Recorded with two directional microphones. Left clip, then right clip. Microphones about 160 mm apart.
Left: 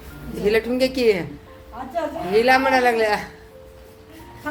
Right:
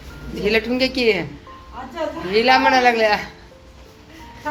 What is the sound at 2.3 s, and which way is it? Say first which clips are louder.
Speech: right 2 dB; 15° left (ahead or behind).